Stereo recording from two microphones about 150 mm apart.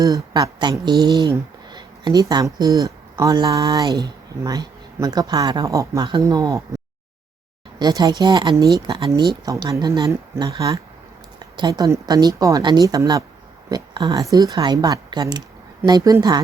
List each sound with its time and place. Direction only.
0.0 s speech: 25° right (ahead or behind)